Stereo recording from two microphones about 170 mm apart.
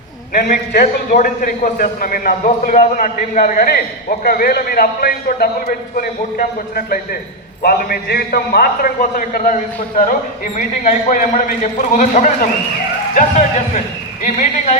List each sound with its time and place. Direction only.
0.3 s a man's voice: 55° left (ahead or behind)